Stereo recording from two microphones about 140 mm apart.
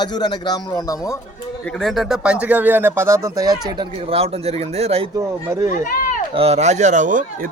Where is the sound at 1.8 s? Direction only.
Centre (ahead or behind); by 3.8 s 30° right (ahead or behind).